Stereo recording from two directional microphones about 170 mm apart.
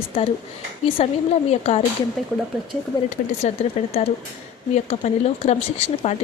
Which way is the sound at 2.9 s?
20° left (ahead or behind).